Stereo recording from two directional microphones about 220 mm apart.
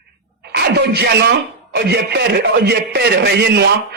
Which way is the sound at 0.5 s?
50° right (ahead or behind).